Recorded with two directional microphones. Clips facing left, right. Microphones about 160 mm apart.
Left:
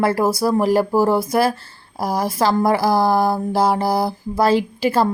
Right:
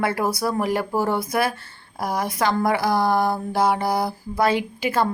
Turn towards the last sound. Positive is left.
turn(degrees=35)  # may be behind; listen again after turning